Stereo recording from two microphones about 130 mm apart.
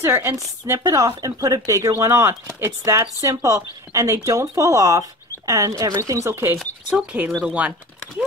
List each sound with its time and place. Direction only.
0.0 s speech: 20° right (ahead or behind)
6.6 s speech: 5° right (ahead or behind)